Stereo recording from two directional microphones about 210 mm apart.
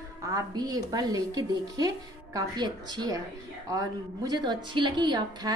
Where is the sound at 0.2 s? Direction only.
15° right (ahead or behind).